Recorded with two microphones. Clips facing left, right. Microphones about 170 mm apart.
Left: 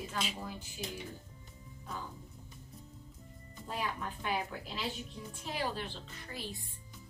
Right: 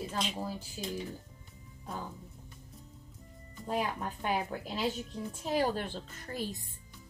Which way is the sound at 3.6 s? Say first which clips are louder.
Right 5 dB; 45° right (ahead or behind).